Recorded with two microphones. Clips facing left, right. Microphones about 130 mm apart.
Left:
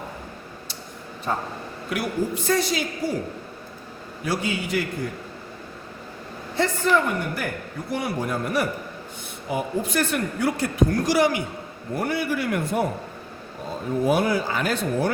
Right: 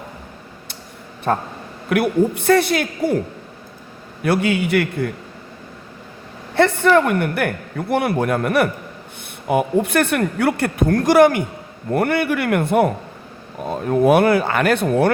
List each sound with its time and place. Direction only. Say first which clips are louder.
1.3 s a man's voice: right 6 dB; 60° right (ahead or behind)
4.2 s a man's voice: right 8 dB; 60° right (ahead or behind)
6.6 s a man's voice: right 7 dB; 65° right (ahead or behind)